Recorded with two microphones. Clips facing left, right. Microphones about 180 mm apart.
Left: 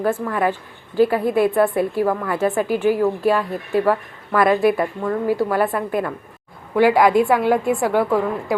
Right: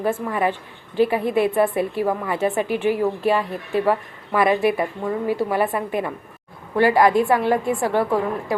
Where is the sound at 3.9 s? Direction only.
10° right (ahead or behind).